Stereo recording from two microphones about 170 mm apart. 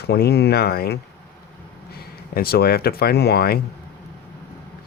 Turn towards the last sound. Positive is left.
turn(degrees=65)  # may be behind; listen again after turning